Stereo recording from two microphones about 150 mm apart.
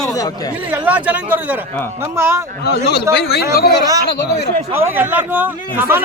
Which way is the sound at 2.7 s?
90° left.